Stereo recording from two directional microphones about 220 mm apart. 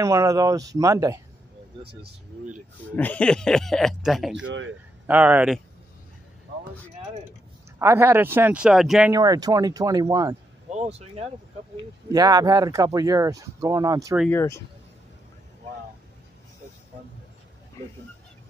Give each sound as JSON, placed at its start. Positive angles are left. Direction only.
{"t": 0.0, "sound": "speech", "side_deg": -15}
{"t": 3.0, "sound": "speech", "side_deg": 5}
{"t": 4.4, "sound": "speech", "side_deg": -60}
{"t": 5.0, "sound": "speech", "side_deg": -10}
{"t": 7.8, "sound": "speech", "side_deg": -10}
{"t": 9.1, "sound": "speech", "side_deg": -15}
{"t": 10.7, "sound": "speech", "side_deg": -30}
{"t": 12.1, "sound": "speech", "side_deg": -15}
{"t": 14.3, "sound": "speech", "side_deg": 15}
{"t": 17.8, "sound": "speech", "side_deg": 15}